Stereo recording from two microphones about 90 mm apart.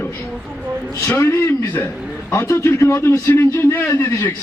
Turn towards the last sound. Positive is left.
turn(degrees=30)  # may be behind; listen again after turning